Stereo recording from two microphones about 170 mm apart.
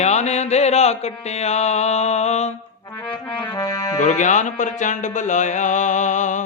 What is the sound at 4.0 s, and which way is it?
Music, 45° left (ahead or behind).